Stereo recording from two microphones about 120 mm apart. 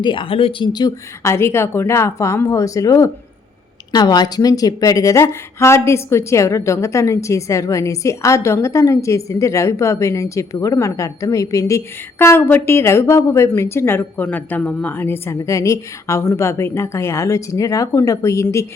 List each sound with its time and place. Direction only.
0.0 s speech: 45° left (ahead or behind)
0.7 s speech: 35° left (ahead or behind)
1.3 s a woman's voice: 20° left (ahead or behind)